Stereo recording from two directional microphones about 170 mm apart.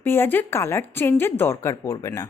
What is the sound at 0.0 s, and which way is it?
A woman's voice, 10° left (ahead or behind).